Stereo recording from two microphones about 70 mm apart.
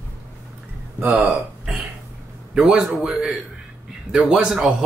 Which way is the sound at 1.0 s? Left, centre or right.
Right.